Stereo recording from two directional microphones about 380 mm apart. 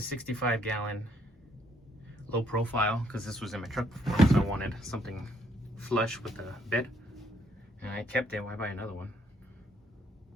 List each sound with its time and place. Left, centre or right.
0.2 s speech: centre
2.3 s speech: centre